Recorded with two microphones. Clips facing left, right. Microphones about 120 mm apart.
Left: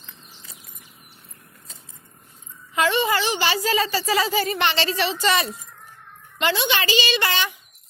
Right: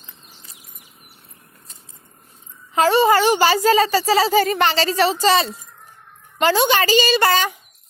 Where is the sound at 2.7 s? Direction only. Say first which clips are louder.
Right 6 dB; 35° right (ahead or behind).